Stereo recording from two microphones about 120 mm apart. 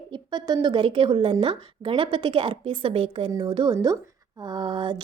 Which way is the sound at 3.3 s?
40° right (ahead or behind).